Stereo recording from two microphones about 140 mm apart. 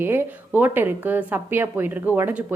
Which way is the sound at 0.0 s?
15° right (ahead or behind).